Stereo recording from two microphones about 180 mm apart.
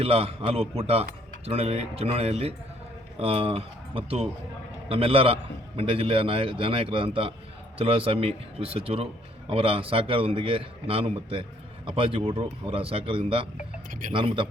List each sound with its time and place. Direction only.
0.0 s a man's voice: 30° right (ahead or behind)